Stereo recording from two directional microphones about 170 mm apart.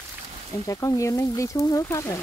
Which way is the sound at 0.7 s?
20° left (ahead or behind).